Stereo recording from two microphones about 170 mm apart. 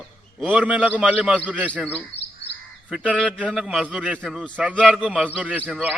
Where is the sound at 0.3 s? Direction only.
10° right (ahead or behind).